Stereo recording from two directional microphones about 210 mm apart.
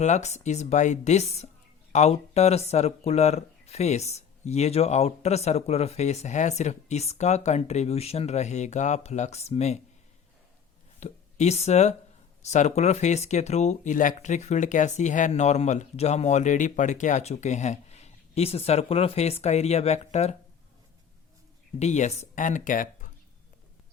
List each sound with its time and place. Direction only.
0.0 s speech: 35° left (ahead or behind)
11.0 s speech: 30° left (ahead or behind)
21.8 s speech: 35° left (ahead or behind)